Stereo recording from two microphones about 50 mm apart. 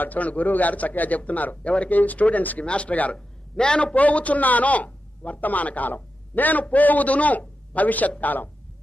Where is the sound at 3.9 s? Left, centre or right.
Left.